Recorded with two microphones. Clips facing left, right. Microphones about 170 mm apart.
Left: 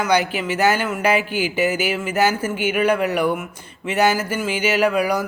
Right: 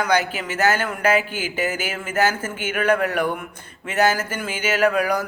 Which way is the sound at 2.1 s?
10° left (ahead or behind).